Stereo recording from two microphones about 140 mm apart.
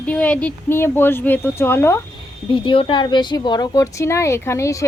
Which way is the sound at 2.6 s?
40° left (ahead or behind).